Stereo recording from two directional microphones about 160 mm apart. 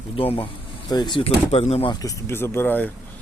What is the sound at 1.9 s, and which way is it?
Speech, 20° left (ahead or behind).